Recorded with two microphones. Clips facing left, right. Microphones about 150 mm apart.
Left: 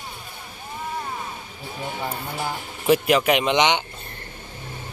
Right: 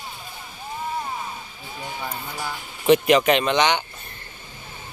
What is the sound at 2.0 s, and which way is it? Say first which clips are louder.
Speech: left 3 dB; 30° left (ahead or behind).